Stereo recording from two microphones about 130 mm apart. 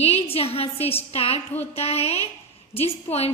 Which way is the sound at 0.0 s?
50° left (ahead or behind).